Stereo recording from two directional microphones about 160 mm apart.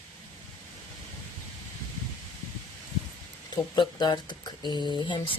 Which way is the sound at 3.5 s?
30° left (ahead or behind).